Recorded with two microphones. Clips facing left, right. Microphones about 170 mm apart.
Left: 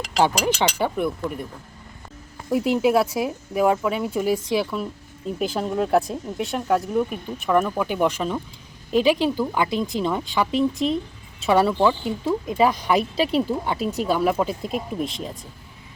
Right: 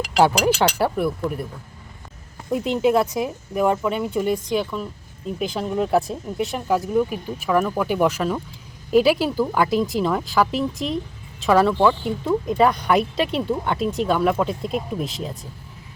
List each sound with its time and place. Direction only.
0.0 s speech: 5° right (ahead or behind)
2.5 s a woman's voice: 5° left (ahead or behind)
11.7 s speech: 20° left (ahead or behind)
12.0 s speech: centre (ahead or behind)